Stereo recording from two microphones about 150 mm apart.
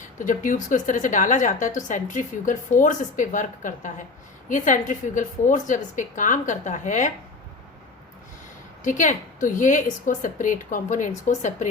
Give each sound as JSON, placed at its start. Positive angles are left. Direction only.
{"t": 0.2, "sound": "a woman's voice", "side_deg": 60}
{"t": 8.8, "sound": "a woman's voice", "side_deg": 60}